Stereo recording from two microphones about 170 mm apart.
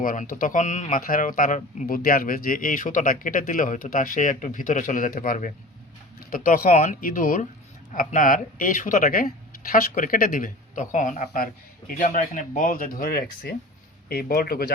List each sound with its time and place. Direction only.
0.0 s speech: 55° left (ahead or behind)